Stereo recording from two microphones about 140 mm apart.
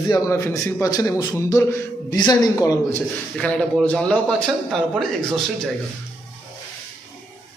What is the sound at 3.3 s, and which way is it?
A man's voice, 10° left (ahead or behind).